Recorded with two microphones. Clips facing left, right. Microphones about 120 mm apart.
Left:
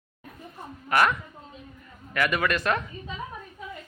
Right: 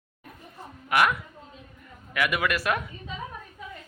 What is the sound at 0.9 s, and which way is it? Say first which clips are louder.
Speech: left 1 dB; 10° right (ahead or behind).